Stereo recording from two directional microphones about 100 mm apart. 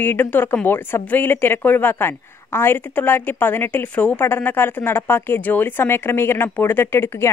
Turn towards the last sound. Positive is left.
turn(degrees=25)  # may be behind; listen again after turning